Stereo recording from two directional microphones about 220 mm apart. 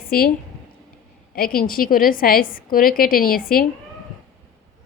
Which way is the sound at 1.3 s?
40° left (ahead or behind).